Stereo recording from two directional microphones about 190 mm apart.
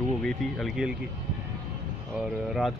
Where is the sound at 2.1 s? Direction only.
Centre (ahead or behind).